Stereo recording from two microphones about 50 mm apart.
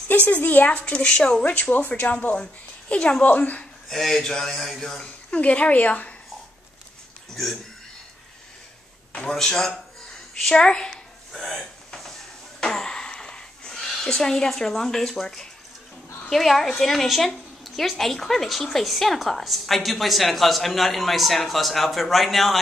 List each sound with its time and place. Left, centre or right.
0.1 s speech: left
0.7 s a woman's voice: left
1.4 s a woman's voice: left
3.9 s speech: centre
5.3 s a woman's voice: left
9.4 s speech: centre
11.3 s a sound: centre
12.5 s a sound: centre
16.3 s a woman's voice: centre